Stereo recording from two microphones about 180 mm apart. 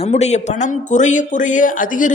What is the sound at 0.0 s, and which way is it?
Speech, 40° left (ahead or behind).